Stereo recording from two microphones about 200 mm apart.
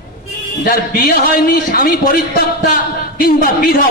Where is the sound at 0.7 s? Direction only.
45° left (ahead or behind).